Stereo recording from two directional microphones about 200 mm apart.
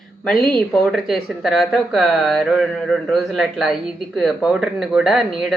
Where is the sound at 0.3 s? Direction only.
Centre (ahead or behind).